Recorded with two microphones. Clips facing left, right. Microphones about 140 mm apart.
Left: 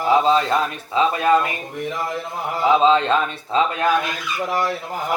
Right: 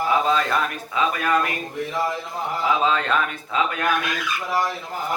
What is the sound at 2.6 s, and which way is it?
Speech, 25° left (ahead or behind).